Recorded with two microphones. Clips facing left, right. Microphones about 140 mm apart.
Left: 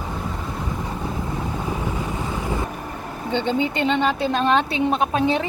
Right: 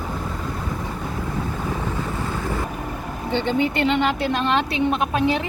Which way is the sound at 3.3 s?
20° left (ahead or behind).